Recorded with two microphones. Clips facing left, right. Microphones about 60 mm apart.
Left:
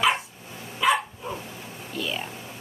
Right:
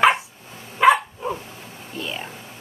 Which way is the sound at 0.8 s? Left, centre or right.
Right.